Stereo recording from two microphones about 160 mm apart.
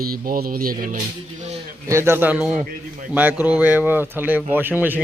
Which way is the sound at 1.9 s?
15° right (ahead or behind).